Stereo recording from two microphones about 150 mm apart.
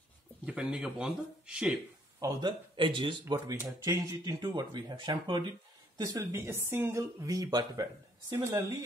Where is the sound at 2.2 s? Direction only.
30° right (ahead or behind).